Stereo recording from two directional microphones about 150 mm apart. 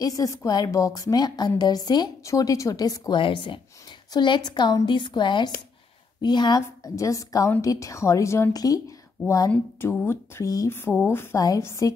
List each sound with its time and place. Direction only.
0.0 s a woman's voice: 25° left (ahead or behind)